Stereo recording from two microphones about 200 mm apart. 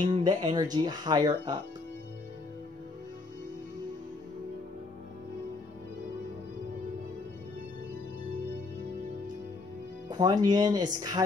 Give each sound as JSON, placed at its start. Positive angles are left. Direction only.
{"t": 0.1, "sound": "speech", "side_deg": -25}
{"t": 10.0, "sound": "speech", "side_deg": -20}